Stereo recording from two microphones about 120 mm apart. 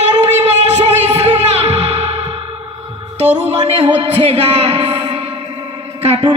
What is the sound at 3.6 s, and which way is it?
A man's voice, 60° right (ahead or behind).